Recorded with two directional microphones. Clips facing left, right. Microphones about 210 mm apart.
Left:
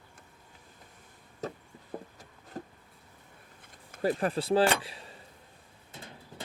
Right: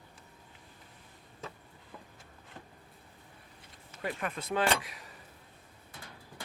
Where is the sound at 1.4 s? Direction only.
40° left (ahead or behind).